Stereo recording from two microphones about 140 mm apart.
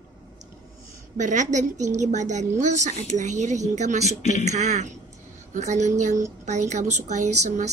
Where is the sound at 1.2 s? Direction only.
60° right (ahead or behind).